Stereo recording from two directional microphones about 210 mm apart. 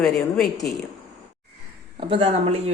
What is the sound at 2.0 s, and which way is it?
Speech, 25° right (ahead or behind).